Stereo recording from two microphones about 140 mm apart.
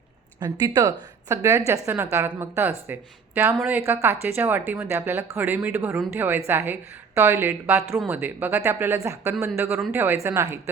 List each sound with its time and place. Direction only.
0.3 s a woman's voice: 30° right (ahead or behind)